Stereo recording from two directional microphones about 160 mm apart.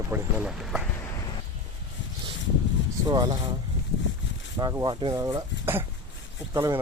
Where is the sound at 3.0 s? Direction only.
25° right (ahead or behind).